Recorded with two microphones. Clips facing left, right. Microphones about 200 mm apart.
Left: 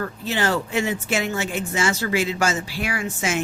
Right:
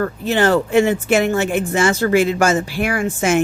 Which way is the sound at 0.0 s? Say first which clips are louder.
Right 7 dB; 55° right (ahead or behind).